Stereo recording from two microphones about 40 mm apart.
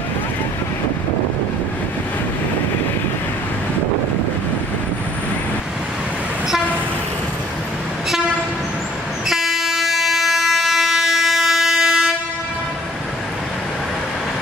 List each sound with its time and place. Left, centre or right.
9.3 s train: centre